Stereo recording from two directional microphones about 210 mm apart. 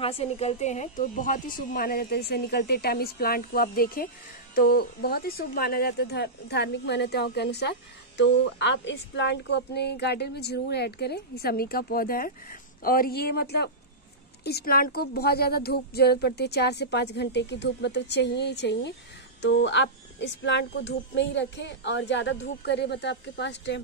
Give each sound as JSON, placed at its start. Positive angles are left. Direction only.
{"t": 0.0, "sound": "speech", "side_deg": 30}